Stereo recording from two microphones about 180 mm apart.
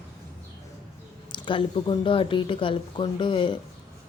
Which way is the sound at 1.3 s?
25° left (ahead or behind).